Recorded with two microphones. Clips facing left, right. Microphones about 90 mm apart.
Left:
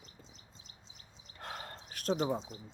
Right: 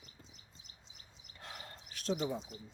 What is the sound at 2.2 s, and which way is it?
Speech, 35° left (ahead or behind).